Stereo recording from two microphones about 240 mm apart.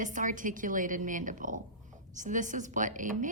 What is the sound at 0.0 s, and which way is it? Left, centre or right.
Speech, right.